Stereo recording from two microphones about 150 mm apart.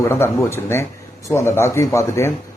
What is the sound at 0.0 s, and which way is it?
Speech, 15° left (ahead or behind).